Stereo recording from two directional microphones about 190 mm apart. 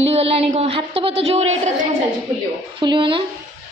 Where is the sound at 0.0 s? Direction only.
30° right (ahead or behind).